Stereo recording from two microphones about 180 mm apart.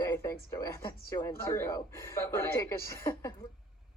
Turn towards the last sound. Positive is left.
turn(degrees=15)  # may be behind; listen again after turning